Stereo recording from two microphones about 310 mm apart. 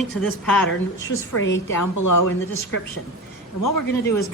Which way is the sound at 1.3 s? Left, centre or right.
Left.